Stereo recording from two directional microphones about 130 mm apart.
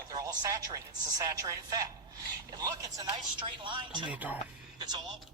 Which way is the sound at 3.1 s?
40° right (ahead or behind).